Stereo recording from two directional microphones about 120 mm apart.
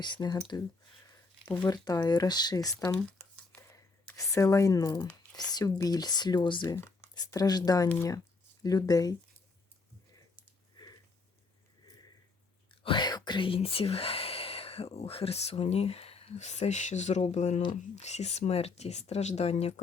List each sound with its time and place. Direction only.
0.0 s speech: 35° left (ahead or behind)
4.2 s speech: 25° left (ahead or behind)
12.8 s speech: 40° left (ahead or behind); by 19.8 s 60° left (ahead or behind)